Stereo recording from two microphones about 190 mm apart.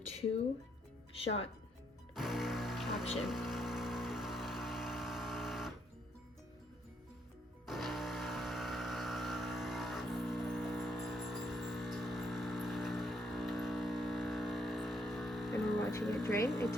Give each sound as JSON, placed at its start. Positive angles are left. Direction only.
{"t": 2.1, "sound": "music", "side_deg": 0}
{"t": 3.2, "sound": "vehicle", "side_deg": 0}
{"t": 7.7, "sound": "music", "side_deg": 0}
{"t": 15.8, "sound": "a sound", "side_deg": 15}
{"t": 16.2, "sound": "speech", "side_deg": 15}